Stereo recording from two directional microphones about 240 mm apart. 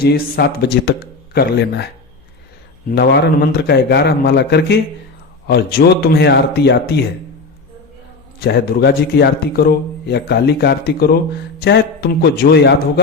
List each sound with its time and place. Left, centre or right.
0.0 s speech: left
2.9 s a man's voice: left
8.4 s a man's voice: left